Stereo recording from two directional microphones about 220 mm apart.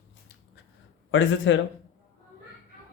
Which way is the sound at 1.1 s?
60° left (ahead or behind).